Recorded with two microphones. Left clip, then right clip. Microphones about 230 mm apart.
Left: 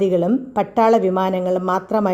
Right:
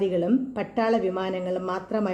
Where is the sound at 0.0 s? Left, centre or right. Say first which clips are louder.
Left 6 dB; left.